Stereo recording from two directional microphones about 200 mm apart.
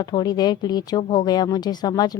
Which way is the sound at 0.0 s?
20° left (ahead or behind).